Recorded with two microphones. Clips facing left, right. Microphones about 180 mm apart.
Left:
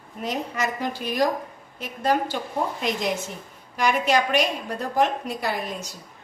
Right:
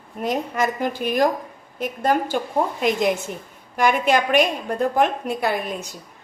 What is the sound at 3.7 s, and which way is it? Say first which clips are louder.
A woman's voice: right 3 dB; 55° right (ahead or behind).